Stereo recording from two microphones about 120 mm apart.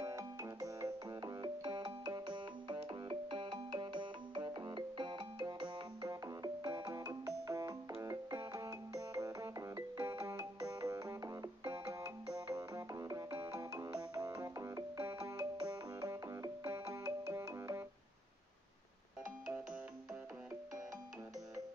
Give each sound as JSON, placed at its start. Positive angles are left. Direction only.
{"t": 0.0, "sound": "music", "side_deg": -25}